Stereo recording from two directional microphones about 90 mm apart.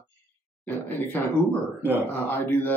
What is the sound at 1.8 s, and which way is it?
Speech, 25° right (ahead or behind).